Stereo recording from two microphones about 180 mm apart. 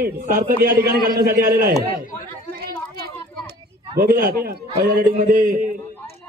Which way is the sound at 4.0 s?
55° right (ahead or behind).